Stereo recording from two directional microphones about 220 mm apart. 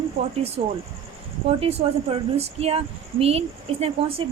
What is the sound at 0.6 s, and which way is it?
A woman's voice, 35° right (ahead or behind).